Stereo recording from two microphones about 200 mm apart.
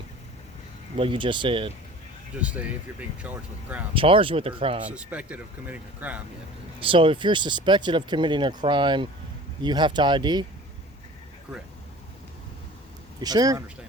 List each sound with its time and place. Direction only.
0.9 s speech: 25° right (ahead or behind)
2.4 s speech: 5° right (ahead or behind)
3.9 s speech: 25° right (ahead or behind)
4.9 s speech: 5° right (ahead or behind)
6.7 s speech: 25° right (ahead or behind)
13.1 s speech: 20° right (ahead or behind)